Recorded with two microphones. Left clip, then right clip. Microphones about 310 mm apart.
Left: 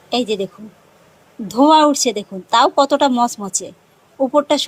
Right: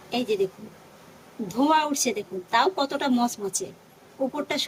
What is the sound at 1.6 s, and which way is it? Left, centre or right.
Speech, centre.